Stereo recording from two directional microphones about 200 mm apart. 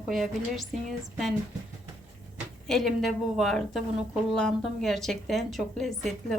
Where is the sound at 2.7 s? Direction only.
Centre (ahead or behind).